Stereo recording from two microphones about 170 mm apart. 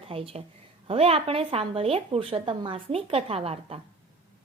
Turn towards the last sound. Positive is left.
turn(degrees=-35)  # may be behind; listen again after turning